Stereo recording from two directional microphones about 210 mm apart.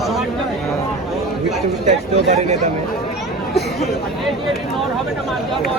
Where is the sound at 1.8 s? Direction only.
30° right (ahead or behind).